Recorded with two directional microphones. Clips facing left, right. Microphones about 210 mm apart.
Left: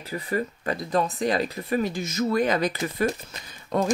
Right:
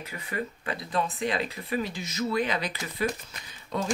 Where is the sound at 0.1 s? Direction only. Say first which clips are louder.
Left 8 dB; 40° left (ahead or behind).